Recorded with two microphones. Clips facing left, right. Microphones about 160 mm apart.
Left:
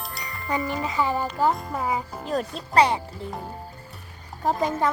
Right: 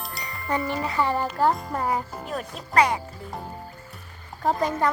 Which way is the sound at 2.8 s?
30° left (ahead or behind).